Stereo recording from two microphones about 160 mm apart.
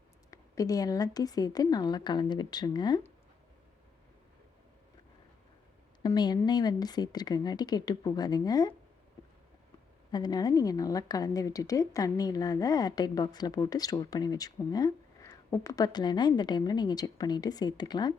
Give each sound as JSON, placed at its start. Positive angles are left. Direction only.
{"t": 0.3, "sound": "a woman's voice", "side_deg": 20}
{"t": 6.0, "sound": "a woman's voice", "side_deg": 25}
{"t": 10.1, "sound": "a woman's voice", "side_deg": 25}